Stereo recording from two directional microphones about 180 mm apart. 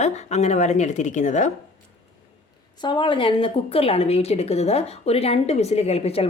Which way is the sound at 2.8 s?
25° left (ahead or behind).